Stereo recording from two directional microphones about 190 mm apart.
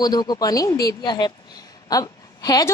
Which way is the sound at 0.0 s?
20° left (ahead or behind).